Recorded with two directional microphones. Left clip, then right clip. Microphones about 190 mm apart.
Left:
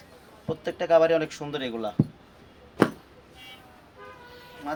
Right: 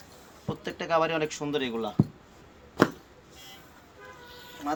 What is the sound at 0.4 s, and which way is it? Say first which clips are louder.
Speech: left 6 dB; 15° left (ahead or behind).